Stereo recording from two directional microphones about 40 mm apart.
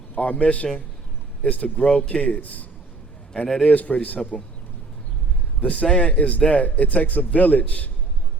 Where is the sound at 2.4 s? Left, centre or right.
Left.